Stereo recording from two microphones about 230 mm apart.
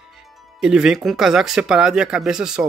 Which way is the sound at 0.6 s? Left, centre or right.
Centre.